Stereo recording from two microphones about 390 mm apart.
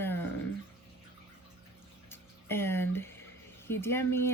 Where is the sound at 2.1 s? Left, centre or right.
Centre.